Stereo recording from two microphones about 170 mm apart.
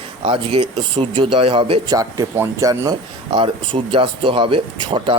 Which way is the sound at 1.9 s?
20° right (ahead or behind).